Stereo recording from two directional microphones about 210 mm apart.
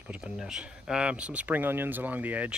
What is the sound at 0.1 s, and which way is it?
Speech, 5° right (ahead or behind).